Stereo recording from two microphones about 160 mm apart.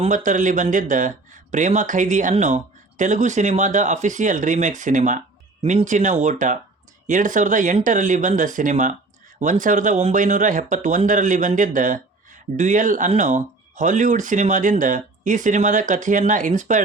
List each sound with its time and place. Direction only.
0.0 s speech: 50° right (ahead or behind)